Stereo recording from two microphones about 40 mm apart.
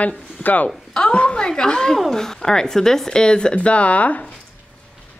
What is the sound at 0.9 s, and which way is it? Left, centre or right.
A woman's voice, left.